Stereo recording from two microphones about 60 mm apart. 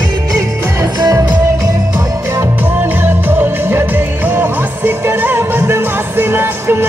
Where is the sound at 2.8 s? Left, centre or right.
Right.